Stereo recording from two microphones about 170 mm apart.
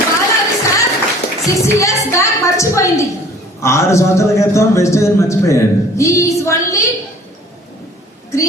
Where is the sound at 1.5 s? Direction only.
20° left (ahead or behind).